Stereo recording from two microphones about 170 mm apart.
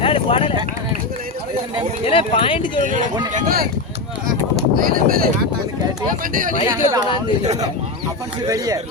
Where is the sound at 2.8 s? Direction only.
50° right (ahead or behind).